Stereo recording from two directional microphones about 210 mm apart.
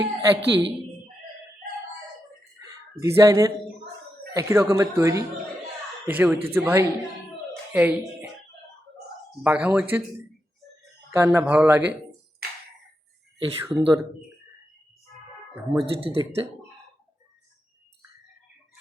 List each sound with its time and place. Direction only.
0.0 s speech: 15° right (ahead or behind)
3.0 s speech: 15° right (ahead or behind)
9.4 s speech: 5° right (ahead or behind)
11.1 s speech: 10° right (ahead or behind)
13.4 s speech: 20° right (ahead or behind)
15.7 s speech: 25° right (ahead or behind)